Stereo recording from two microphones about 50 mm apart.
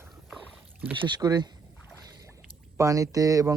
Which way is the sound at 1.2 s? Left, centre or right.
Right.